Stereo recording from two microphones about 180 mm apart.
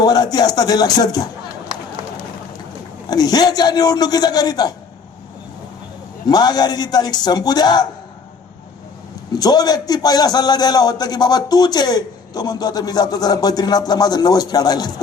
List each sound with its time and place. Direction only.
0.0 s a man's voice: 20° left (ahead or behind)
3.1 s a man's voice: 20° left (ahead or behind)
6.2 s a man's voice: 20° left (ahead or behind)
9.3 s a man's voice: 20° left (ahead or behind)